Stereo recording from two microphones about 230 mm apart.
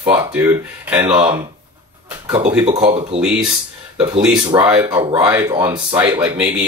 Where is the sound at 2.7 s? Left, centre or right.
Right.